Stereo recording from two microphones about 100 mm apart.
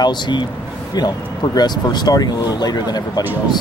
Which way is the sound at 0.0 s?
50° left (ahead or behind).